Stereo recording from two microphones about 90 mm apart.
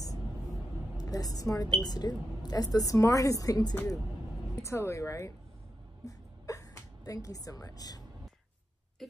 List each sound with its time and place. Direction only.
0.9 s a woman's voice: 45° left (ahead or behind)
6.0 s music: 40° left (ahead or behind)